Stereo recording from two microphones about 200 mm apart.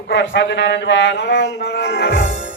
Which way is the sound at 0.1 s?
65° left (ahead or behind).